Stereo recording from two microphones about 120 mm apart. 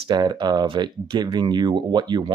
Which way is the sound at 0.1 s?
35° right (ahead or behind).